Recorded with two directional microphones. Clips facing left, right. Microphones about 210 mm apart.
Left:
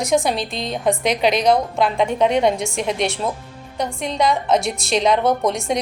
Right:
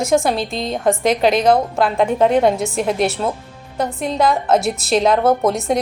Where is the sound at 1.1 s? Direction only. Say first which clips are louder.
Right 2 dB; 50° right (ahead or behind).